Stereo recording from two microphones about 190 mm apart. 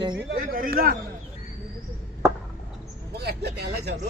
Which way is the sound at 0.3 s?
50° right (ahead or behind).